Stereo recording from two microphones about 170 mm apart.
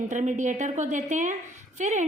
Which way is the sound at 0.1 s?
45° right (ahead or behind).